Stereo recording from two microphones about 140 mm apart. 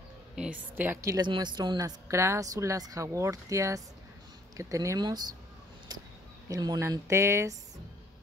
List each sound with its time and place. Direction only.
0.4 s a woman's voice: 10° right (ahead or behind)
1.1 s speech: 30° right (ahead or behind)
6.5 s speech: 25° right (ahead or behind)